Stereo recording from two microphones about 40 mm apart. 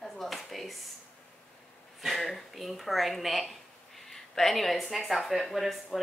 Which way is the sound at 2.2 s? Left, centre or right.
Centre.